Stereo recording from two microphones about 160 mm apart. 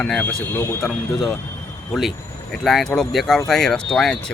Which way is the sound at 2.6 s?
Centre (ahead or behind).